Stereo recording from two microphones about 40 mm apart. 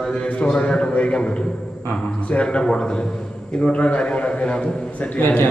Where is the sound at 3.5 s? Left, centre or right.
Left.